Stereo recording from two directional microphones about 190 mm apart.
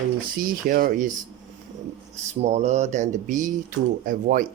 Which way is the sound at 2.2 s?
35° right (ahead or behind).